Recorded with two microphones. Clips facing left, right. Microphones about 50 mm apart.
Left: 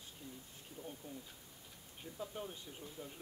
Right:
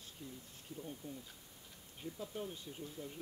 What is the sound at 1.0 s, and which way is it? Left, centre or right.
Speech, left.